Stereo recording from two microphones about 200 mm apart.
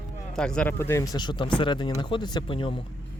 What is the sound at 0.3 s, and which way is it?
Speech, 5° left (ahead or behind).